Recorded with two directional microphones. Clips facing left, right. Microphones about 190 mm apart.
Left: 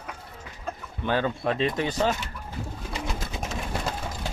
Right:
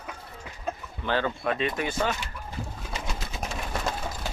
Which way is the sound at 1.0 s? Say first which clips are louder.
Left 2 dB; 15° left (ahead or behind).